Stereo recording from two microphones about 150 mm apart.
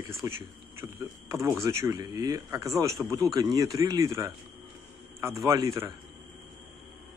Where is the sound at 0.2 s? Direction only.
25° right (ahead or behind).